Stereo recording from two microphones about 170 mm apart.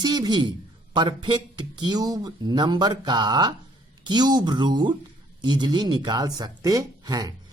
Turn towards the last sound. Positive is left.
turn(degrees=-25)  # may be behind; listen again after turning